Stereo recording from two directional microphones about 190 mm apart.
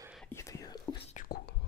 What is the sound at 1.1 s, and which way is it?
Whispering, 45° left (ahead or behind).